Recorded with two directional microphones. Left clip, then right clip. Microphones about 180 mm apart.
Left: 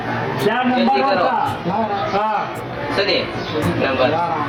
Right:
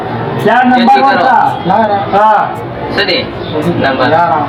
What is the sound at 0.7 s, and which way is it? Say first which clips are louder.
Speech: right 9 dB; 15° right (ahead or behind).